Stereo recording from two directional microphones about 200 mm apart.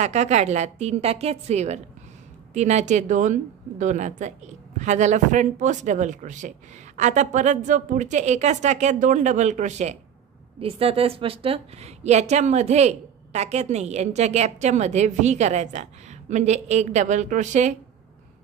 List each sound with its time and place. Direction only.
0.0 s a woman's voice: 35° right (ahead or behind)